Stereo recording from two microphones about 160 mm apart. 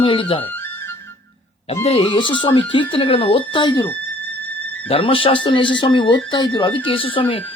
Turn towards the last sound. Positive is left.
turn(degrees=30)  # may be behind; listen again after turning